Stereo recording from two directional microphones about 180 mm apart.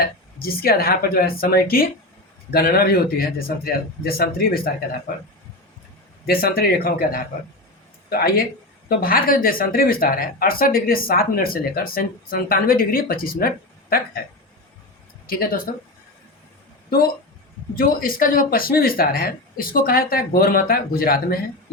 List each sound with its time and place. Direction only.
0.0 s speech: 55° left (ahead or behind)
6.2 s speech: 60° left (ahead or behind)
15.3 s speech: 55° left (ahead or behind)
17.7 s speech: 50° left (ahead or behind)